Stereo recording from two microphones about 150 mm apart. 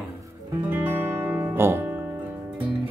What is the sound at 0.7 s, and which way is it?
Music, 15° right (ahead or behind).